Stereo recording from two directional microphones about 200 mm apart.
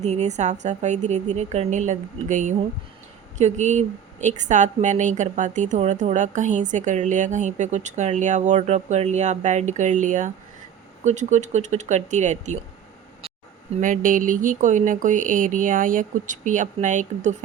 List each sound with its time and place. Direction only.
0.0 s speech: 35° right (ahead or behind)
13.8 s speech: 40° right (ahead or behind)